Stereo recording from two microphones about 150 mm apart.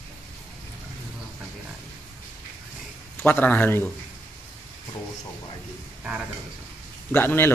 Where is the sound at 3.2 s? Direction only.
10° left (ahead or behind).